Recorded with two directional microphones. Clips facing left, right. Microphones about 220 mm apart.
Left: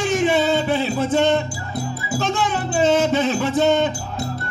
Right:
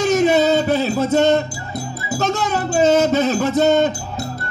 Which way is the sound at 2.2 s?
40° right (ahead or behind).